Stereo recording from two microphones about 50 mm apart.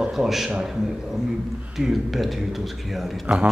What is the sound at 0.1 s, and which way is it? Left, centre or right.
Speech, centre.